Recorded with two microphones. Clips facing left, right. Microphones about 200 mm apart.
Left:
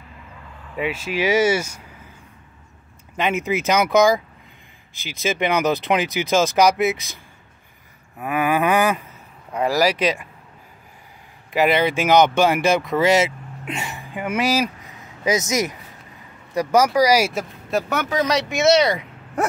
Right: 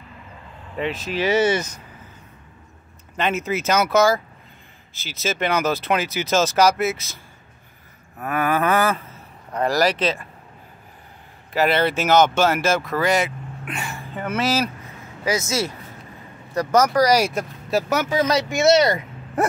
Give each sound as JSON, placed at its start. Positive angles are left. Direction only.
{"t": 0.7, "sound": "speech", "side_deg": 10}
{"t": 3.2, "sound": "speech", "side_deg": 15}
{"t": 8.2, "sound": "speech", "side_deg": 10}
{"t": 11.5, "sound": "speech", "side_deg": 15}